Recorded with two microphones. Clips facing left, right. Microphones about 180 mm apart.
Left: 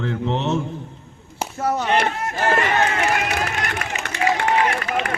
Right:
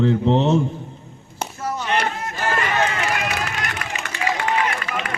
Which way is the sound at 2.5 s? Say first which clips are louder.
Left 1 dB; 35° left (ahead or behind).